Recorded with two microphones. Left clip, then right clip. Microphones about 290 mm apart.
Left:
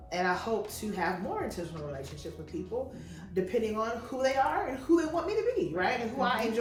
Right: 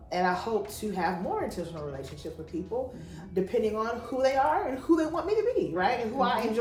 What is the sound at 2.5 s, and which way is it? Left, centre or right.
A woman's voice, centre.